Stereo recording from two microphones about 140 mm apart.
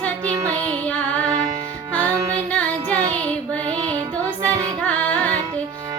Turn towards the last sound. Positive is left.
turn(degrees=10)  # may be behind; listen again after turning